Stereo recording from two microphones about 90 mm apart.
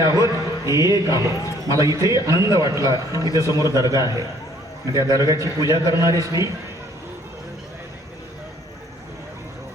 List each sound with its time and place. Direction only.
0.0 s a man's voice: 35° right (ahead or behind)
1.5 s a man's voice: 45° left (ahead or behind)
1.8 s a man's voice: 40° right (ahead or behind)